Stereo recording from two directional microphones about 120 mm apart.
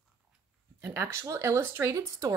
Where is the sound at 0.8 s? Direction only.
20° right (ahead or behind).